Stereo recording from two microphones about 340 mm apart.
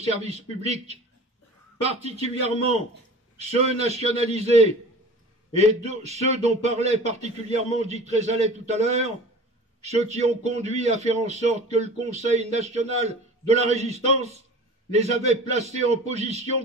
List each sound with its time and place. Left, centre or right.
0.0 s a man's voice: centre
3.3 s a man's voice: centre